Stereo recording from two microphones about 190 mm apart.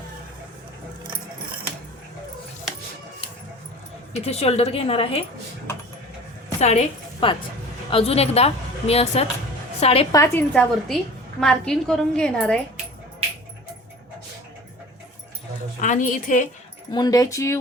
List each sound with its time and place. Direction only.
4.1 s a woman's voice: 35° left (ahead or behind)
6.6 s a woman's voice: 35° left (ahead or behind)
10.1 s speech: 15° left (ahead or behind)
10.5 s a woman's voice: 5° left (ahead or behind)
15.8 s a woman's voice: 40° left (ahead or behind)
16.9 s speech: 20° left (ahead or behind)